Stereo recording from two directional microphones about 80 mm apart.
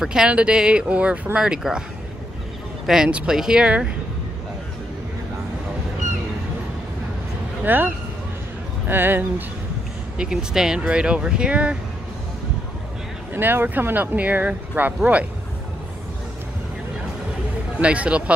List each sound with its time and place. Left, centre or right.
0.0 s speech: centre
2.9 s speech: centre
7.6 s speech: right
10.1 s speech: centre
13.3 s speech: right
17.7 s speech: centre